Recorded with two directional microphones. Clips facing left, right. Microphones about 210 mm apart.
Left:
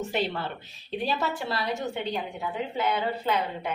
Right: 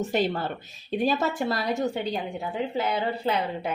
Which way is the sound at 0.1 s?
40° right (ahead or behind).